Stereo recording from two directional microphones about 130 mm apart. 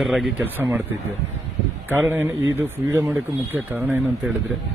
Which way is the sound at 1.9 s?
15° right (ahead or behind).